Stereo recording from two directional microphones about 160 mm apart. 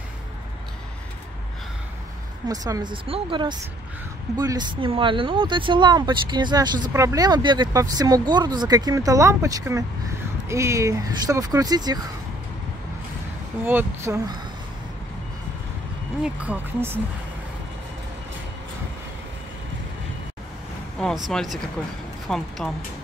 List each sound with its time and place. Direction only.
2.4 s speech: 25° right (ahead or behind)
13.7 s speech: 15° right (ahead or behind)
16.2 s speech: 10° right (ahead or behind)
21.3 s speech: centre (ahead or behind)